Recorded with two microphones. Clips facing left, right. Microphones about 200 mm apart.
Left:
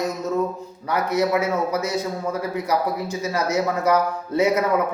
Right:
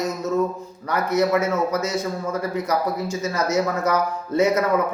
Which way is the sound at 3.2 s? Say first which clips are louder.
Even; 15° left (ahead or behind).